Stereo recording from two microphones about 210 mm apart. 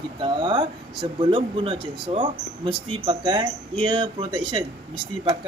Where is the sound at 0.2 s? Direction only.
20° right (ahead or behind).